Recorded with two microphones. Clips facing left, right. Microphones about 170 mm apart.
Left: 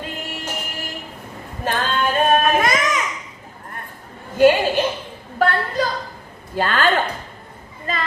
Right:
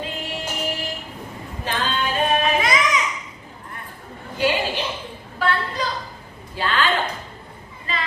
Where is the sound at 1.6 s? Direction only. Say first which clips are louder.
Left 4 dB; 50° left (ahead or behind).